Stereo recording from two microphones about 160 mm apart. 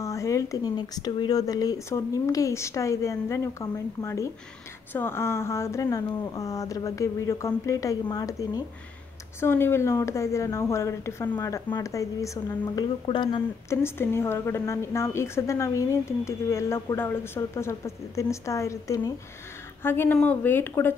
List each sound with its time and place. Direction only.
0.0 s a woman's voice: 20° left (ahead or behind)
13.7 s a woman's voice: 15° left (ahead or behind)